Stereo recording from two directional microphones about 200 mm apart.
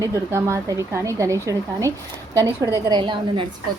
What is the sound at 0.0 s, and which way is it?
A woman's voice, 15° right (ahead or behind).